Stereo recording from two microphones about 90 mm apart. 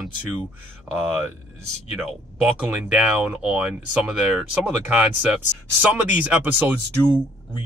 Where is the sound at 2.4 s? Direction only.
15° right (ahead or behind).